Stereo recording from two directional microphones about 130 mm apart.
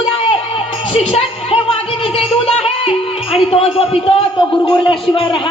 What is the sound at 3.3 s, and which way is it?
A man's voice, 50° left (ahead or behind).